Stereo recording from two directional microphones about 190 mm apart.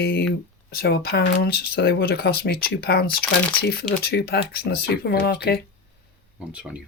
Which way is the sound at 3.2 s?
10° left (ahead or behind).